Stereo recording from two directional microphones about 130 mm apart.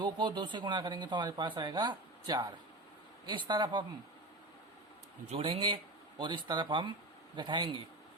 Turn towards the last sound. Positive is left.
turn(degrees=-35)  # may be behind; listen again after turning